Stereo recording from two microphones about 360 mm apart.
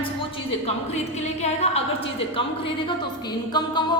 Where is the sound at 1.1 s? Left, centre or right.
Centre.